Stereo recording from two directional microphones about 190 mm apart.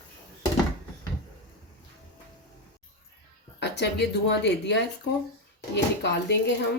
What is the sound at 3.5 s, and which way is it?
A woman's voice, 65° left (ahead or behind).